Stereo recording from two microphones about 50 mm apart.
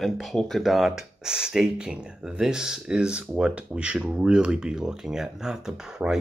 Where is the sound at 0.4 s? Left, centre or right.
Centre.